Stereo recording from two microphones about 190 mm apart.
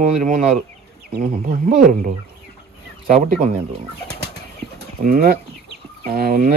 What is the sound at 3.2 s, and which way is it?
Speech, 45° right (ahead or behind).